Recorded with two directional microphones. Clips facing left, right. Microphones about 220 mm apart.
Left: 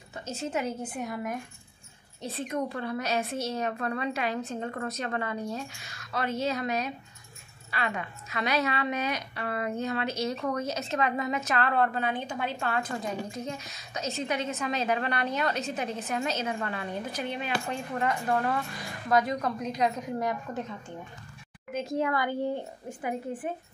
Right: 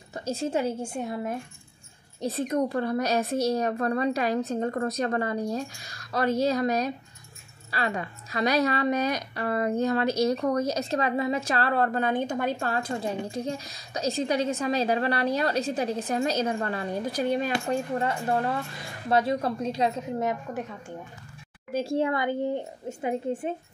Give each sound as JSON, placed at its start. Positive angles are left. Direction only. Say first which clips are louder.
{"t": 0.1, "sound": "a woman's voice", "louder": "right 5 dB", "side_deg": -35}
{"t": 2.3, "sound": "a woman's voice", "louder": "right 5 dB", "side_deg": -40}
{"t": 21.7, "sound": "a woman's voice", "louder": "right 3 dB", "side_deg": -30}